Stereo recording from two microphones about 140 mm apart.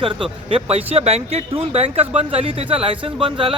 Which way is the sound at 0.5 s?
45° right (ahead or behind).